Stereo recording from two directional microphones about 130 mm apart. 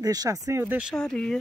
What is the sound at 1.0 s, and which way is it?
Speech, 5° left (ahead or behind).